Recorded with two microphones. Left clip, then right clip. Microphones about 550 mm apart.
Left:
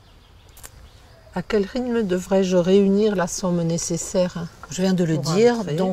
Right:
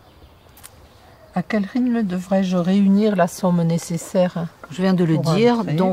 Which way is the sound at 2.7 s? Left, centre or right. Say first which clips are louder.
Right 2 dB; left.